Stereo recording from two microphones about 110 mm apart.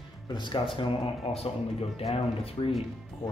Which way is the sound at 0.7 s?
55° left (ahead or behind).